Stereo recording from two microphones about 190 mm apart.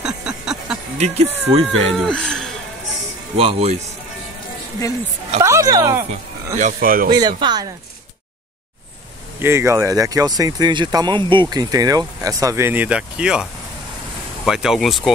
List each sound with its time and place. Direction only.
0.0 s music: 5° right (ahead or behind)
0.9 s speech: 35° right (ahead or behind)
2.0 s speech: 5° left (ahead or behind)
3.3 s speech: 30° right (ahead or behind)
5.4 s speech: 15° right (ahead or behind)
6.0 s speech: 40° right (ahead or behind)
7.1 s speech: 20° right (ahead or behind)
9.4 s speech: 15° right (ahead or behind)